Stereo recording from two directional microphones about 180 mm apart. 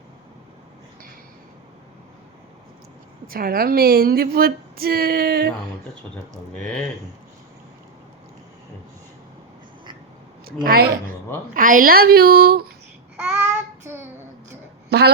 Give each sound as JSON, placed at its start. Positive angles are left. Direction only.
{"t": 3.2, "sound": "a woman's voice", "side_deg": -55}
{"t": 10.4, "sound": "a woman's voice", "side_deg": -55}
{"t": 13.1, "sound": "child singing", "side_deg": -5}
{"t": 14.8, "sound": "a woman's voice", "side_deg": -65}